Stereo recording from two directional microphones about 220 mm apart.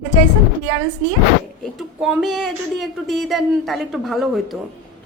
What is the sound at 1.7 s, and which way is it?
Speech, 5° right (ahead or behind).